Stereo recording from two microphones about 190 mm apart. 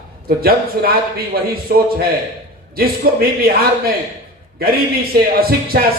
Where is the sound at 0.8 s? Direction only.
50° right (ahead or behind).